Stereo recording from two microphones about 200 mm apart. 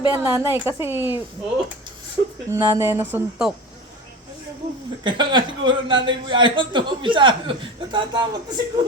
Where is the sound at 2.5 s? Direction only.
20° right (ahead or behind).